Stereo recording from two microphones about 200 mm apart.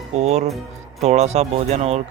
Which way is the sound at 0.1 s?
30° right (ahead or behind).